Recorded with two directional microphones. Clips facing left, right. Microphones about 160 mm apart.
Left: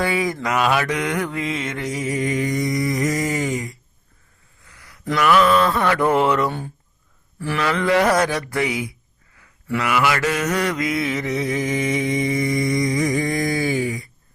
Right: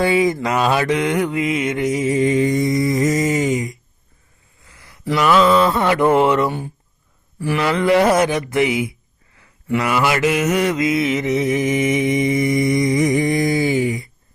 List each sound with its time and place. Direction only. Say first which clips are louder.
0.0 s mantra: right 5 dB; 25° right (ahead or behind)
4.6 s a sound: right 1 dB; 25° right (ahead or behind)
5.1 s mantra: right 2 dB; 25° right (ahead or behind)
7.3 s speech: right 4 dB; 15° right (ahead or behind)
7.6 s mantra: right 3 dB; 30° right (ahead or behind)
9.4 s a sound: right 4 dB; 20° right (ahead or behind)
9.8 s mantra: right 2 dB; 30° right (ahead or behind)